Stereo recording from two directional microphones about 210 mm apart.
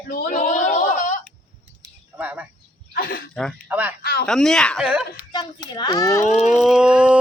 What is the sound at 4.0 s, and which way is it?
Speech, 45° left (ahead or behind).